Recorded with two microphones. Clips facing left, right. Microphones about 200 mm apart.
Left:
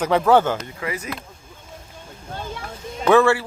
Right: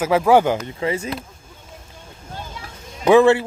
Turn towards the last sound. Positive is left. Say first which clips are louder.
# right 3 dB
turn(degrees=-20)  # may be behind; listen again after turning